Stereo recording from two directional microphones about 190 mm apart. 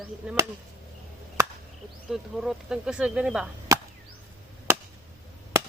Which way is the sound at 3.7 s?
20° right (ahead or behind).